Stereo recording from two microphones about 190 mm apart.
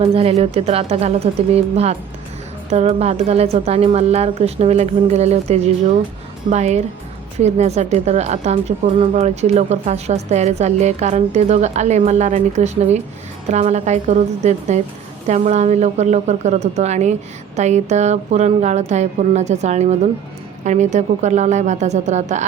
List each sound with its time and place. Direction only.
0.0 s a woman's voice: 30° right (ahead or behind)